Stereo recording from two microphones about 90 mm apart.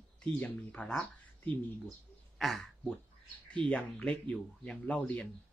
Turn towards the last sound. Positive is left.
turn(degrees=15)  # may be behind; listen again after turning